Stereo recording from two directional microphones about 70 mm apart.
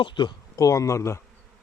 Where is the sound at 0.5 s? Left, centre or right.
Left.